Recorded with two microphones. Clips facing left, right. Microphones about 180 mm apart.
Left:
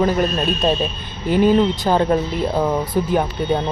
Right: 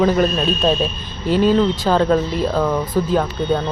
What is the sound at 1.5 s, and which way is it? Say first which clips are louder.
Speech: even; 15° left (ahead or behind).